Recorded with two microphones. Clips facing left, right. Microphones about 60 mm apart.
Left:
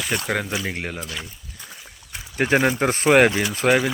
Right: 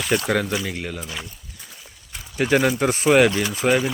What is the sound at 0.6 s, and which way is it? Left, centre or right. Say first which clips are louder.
Speech: even; left.